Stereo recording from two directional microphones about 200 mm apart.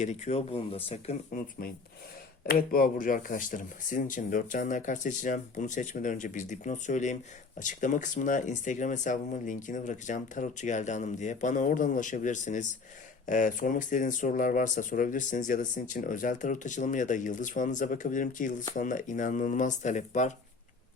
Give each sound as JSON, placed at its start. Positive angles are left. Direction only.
{"t": 0.0, "sound": "speech", "side_deg": 35}
{"t": 1.3, "sound": "speech", "side_deg": 45}